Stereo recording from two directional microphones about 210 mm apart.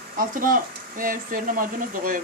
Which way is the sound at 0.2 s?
40° right (ahead or behind).